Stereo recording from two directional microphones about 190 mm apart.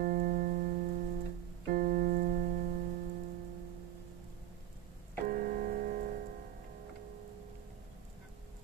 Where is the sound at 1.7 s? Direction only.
50° right (ahead or behind).